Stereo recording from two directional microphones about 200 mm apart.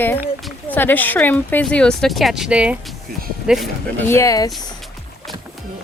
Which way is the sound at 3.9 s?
10° left (ahead or behind).